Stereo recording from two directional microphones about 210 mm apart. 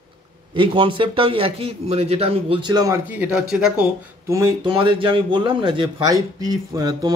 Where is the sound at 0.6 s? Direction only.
25° right (ahead or behind); by 3.8 s 5° right (ahead or behind).